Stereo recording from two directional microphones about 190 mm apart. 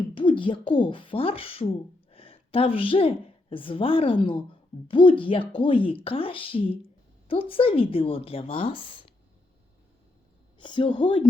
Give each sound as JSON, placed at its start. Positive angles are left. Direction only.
{"t": 0.1, "sound": "speech", "side_deg": 25}
{"t": 10.6, "sound": "speech", "side_deg": 25}